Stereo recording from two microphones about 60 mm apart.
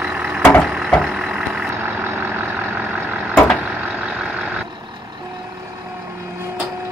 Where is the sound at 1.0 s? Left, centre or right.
Centre.